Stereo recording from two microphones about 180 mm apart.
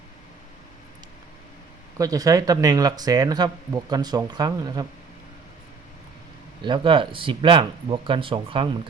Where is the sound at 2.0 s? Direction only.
20° right (ahead or behind).